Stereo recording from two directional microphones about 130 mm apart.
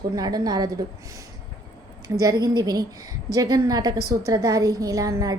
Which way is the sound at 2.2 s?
30° right (ahead or behind).